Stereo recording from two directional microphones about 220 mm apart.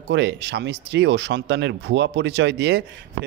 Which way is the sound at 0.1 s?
50° right (ahead or behind).